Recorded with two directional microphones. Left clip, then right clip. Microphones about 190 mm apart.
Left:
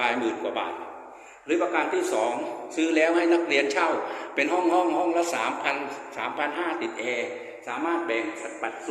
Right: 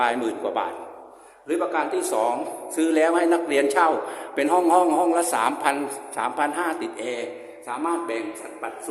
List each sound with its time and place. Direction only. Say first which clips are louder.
0.0 s a man's voice: right 3 dB; 20° right (ahead or behind)